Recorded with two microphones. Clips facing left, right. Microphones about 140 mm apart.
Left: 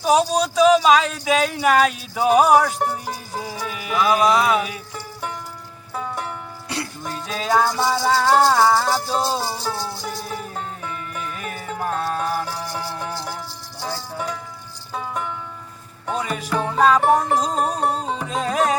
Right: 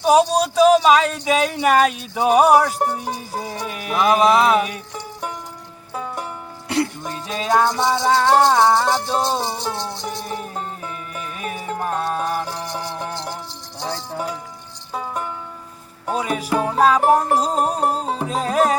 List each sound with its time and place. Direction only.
0.0 s speech: centre (ahead or behind)
4.2 s music: 25° right (ahead or behind)
4.5 s music: centre (ahead or behind)
6.7 s music: 20° right (ahead or behind)
7.0 s music: centre (ahead or behind)
7.8 s speech: 5° left (ahead or behind)
10.0 s music: centre (ahead or behind)
13.7 s jingle bell: 20° right (ahead or behind)
16.0 s music: 10° right (ahead or behind)